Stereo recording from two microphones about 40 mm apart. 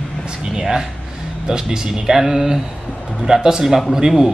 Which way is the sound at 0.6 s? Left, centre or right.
Centre.